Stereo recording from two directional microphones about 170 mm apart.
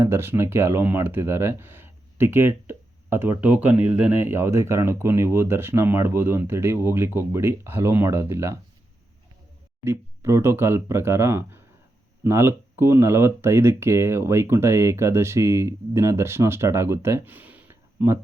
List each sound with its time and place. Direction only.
0.0 s speech: 15° right (ahead or behind)
9.8 s speech: 15° right (ahead or behind)